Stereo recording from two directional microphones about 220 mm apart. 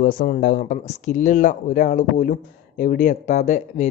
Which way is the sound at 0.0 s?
40° left (ahead or behind).